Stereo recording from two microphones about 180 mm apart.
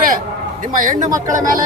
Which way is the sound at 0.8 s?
45° right (ahead or behind).